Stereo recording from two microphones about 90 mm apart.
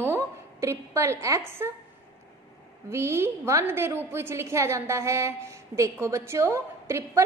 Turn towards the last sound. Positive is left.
turn(degrees=-30)  # may be behind; listen again after turning